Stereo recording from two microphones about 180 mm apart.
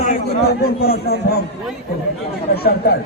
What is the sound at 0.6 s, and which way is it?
Speech, 60° left (ahead or behind).